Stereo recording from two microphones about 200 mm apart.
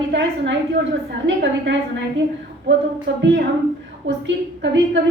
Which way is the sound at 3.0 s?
60° right (ahead or behind).